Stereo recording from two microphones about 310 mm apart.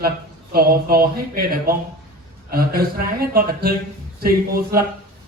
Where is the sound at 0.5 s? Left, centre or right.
Right.